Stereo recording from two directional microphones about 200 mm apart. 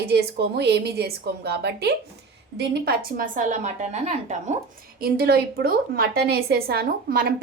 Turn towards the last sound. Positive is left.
turn(degrees=-50)  # may be behind; listen again after turning